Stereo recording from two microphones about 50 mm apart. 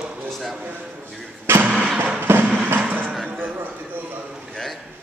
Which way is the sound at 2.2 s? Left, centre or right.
Right.